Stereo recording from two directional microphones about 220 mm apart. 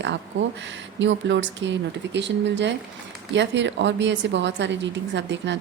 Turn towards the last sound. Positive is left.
turn(degrees=-55)  # may be behind; listen again after turning